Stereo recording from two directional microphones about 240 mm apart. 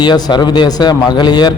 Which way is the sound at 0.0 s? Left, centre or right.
Centre.